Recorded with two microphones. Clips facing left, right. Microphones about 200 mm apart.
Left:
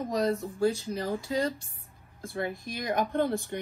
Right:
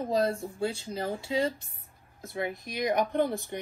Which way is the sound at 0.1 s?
25° right (ahead or behind).